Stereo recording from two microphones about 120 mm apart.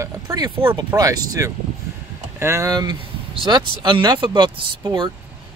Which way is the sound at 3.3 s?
45° right (ahead or behind).